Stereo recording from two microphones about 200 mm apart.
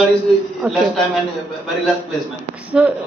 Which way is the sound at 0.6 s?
5° right (ahead or behind).